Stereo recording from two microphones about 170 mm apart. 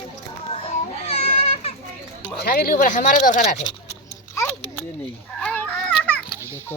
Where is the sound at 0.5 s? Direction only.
40° left (ahead or behind).